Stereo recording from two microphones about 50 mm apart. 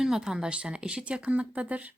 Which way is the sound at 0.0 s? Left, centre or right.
Centre.